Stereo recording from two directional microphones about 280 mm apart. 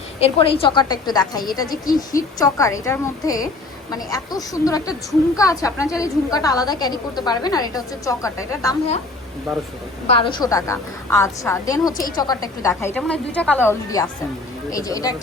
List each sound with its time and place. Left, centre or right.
0.2 s a woman's voice: centre
10.1 s a woman's voice: centre